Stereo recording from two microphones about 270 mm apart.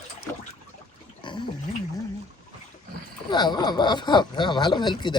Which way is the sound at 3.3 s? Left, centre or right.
Centre.